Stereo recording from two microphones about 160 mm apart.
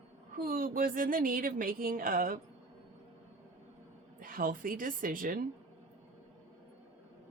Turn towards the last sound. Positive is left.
turn(degrees=-60)  # may be behind; listen again after turning